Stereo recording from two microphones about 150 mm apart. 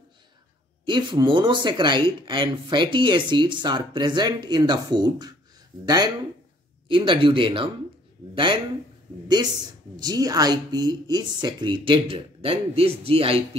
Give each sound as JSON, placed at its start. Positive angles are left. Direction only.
{"t": 0.8, "sound": "speech", "side_deg": -30}
{"t": 9.9, "sound": "speech", "side_deg": -25}